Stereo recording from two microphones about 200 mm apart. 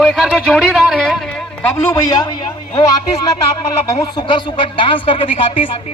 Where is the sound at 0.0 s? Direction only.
Centre (ahead or behind).